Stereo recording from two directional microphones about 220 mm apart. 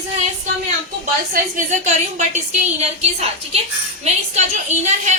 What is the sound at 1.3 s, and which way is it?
A woman's voice, 35° right (ahead or behind).